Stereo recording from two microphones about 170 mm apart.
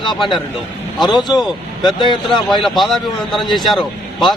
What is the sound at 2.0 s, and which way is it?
Speech, 25° left (ahead or behind).